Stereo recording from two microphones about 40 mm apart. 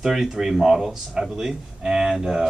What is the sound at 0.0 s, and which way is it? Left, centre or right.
A woman's voice, centre.